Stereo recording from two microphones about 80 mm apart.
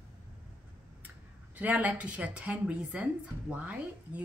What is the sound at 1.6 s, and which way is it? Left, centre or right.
A woman's voice, centre.